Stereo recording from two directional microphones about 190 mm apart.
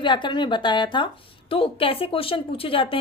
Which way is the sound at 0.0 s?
25° left (ahead or behind).